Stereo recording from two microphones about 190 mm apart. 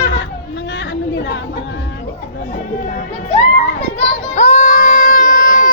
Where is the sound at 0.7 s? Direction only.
70° left (ahead or behind).